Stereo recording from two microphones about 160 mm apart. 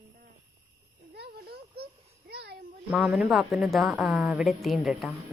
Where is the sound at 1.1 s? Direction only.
85° right.